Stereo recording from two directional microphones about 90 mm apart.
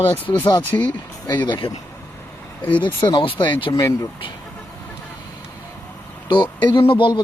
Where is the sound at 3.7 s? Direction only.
35° left (ahead or behind).